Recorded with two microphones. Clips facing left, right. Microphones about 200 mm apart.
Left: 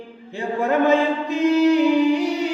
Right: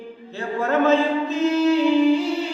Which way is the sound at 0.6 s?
15° left (ahead or behind).